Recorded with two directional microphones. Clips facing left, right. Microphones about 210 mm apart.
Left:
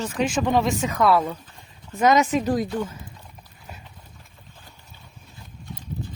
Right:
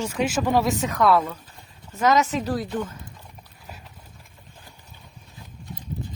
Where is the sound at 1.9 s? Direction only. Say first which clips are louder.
Left 2 dB; 15° left (ahead or behind).